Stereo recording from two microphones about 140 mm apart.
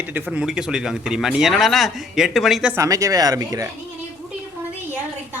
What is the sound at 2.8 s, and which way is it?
Speech, 25° right (ahead or behind).